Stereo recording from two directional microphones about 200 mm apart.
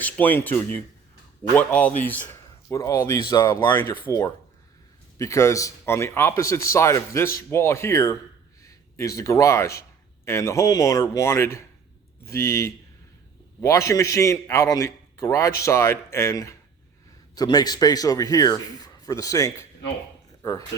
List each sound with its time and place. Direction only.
0.0 s a man's voice: 10° left (ahead or behind)